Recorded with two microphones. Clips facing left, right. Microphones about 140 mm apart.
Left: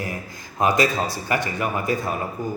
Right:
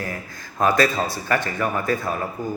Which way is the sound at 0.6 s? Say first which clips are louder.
Right 1 dB; 20° left (ahead or behind).